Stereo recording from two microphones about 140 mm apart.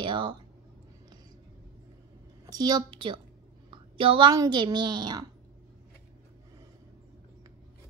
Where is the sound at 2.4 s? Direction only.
30° right (ahead or behind).